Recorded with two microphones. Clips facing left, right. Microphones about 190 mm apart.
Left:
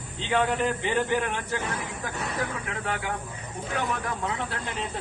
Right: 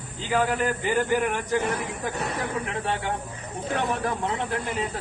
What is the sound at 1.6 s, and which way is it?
Speech, 60° right (ahead or behind).